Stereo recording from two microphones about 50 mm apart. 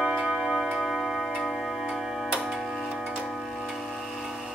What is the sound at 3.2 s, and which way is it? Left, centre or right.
Tick-tock, centre.